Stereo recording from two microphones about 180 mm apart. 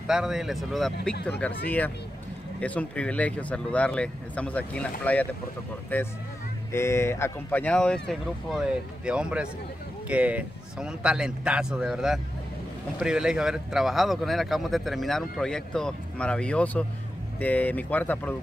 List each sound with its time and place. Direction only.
0.0 s speech: 5° right (ahead or behind)
2.6 s speech: 10° left (ahead or behind)